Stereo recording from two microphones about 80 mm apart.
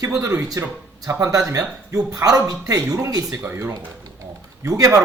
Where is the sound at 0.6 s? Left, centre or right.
Right.